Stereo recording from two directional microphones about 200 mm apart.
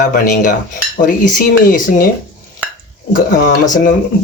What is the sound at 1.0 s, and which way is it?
Speech, 40° left (ahead or behind).